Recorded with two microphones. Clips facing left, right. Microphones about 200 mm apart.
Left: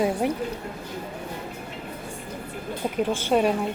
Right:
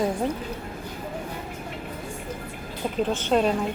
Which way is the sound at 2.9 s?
10° left (ahead or behind).